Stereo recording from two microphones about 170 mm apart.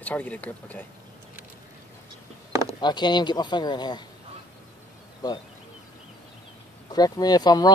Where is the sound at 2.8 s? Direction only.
25° left (ahead or behind).